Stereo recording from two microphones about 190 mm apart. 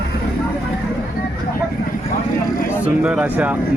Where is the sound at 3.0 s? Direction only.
5° right (ahead or behind).